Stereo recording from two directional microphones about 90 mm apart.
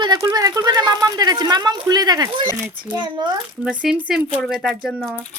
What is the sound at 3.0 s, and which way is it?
Speech, 60° right (ahead or behind).